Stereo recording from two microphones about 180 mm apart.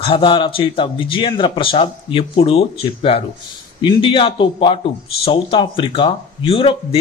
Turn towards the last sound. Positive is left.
turn(degrees=30)  # may be behind; listen again after turning